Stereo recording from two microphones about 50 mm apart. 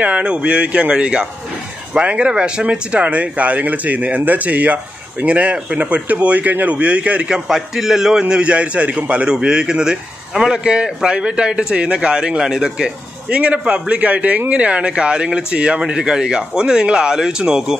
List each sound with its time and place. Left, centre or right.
0.0 s a man's voice: right
7.4 s speech: centre
8.2 s a man's voice: right
9.3 s a man's voice: centre